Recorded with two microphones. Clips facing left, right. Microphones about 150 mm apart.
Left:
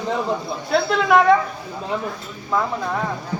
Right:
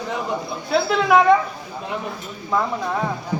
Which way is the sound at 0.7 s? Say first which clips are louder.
Even; centre (ahead or behind).